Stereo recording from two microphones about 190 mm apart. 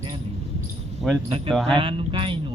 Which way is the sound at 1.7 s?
25° right (ahead or behind).